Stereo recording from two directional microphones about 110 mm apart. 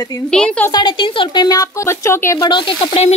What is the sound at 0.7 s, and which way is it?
Speech, 50° left (ahead or behind).